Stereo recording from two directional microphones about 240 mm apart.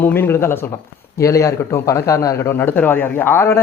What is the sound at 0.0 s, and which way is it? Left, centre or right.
Speech, centre.